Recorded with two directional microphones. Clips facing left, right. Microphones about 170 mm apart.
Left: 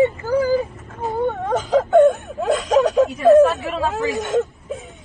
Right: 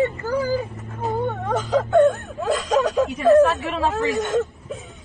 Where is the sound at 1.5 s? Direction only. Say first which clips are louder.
Left 3 dB; 20° left (ahead or behind).